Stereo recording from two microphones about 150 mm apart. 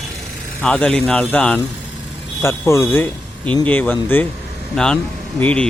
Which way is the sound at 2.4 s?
15° left (ahead or behind).